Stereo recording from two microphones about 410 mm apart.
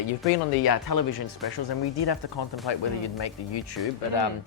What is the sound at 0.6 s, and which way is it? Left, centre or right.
Speech, left.